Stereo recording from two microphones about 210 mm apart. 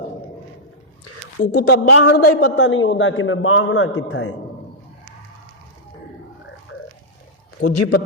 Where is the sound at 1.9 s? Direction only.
90° left; by 4.3 s 75° left (ahead or behind).